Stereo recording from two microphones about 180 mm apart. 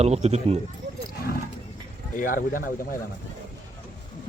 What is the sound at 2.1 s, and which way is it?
Speech, 50° left (ahead or behind).